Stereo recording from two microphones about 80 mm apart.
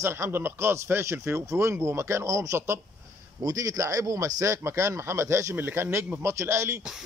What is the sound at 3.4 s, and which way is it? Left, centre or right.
A man's voice, right.